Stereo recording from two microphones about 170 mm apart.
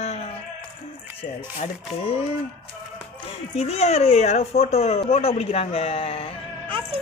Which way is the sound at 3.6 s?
40° left (ahead or behind).